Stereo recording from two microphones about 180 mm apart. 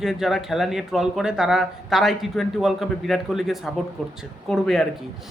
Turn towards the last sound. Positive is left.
turn(degrees=0)  # may be behind; listen again after turning